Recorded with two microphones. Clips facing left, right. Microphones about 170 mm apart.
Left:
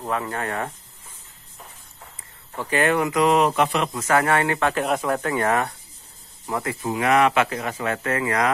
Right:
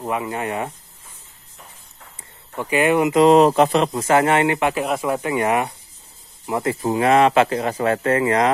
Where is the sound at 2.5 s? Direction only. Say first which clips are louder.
Right 4 dB; 15° right (ahead or behind).